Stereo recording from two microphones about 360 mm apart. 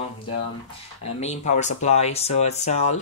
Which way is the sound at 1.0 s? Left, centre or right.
Centre.